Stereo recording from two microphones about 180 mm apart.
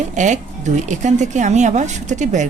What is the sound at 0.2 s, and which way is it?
Speech, 40° right (ahead or behind).